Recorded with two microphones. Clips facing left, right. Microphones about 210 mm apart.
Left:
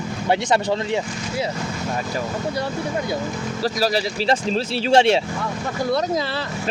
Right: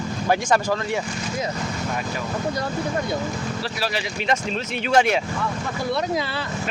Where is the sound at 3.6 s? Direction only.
40° left (ahead or behind).